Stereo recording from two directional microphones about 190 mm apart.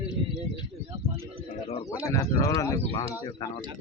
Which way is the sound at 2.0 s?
15° left (ahead or behind).